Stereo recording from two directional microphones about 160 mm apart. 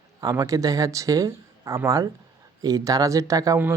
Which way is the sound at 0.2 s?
20° right (ahead or behind).